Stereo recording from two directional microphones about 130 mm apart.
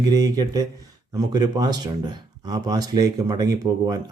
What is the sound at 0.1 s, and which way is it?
Speech, 30° right (ahead or behind).